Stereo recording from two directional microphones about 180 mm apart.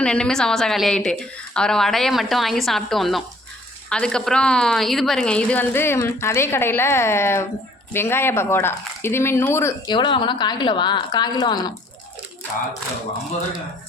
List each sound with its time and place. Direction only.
0.0 s a woman's voice: 5° left (ahead or behind); by 11.7 s 25° left (ahead or behind)